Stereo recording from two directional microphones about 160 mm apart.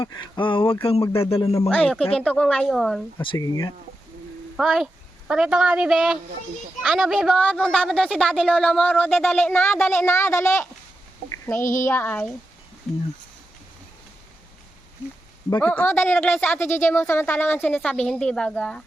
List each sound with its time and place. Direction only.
0.0 s a sound: 30° left (ahead or behind)
1.6 s a woman's voice: 5° left (ahead or behind)
3.2 s speech: 25° left (ahead or behind)
4.5 s a woman's voice: centre (ahead or behind)
15.4 s a woman's voice: 15° left (ahead or behind)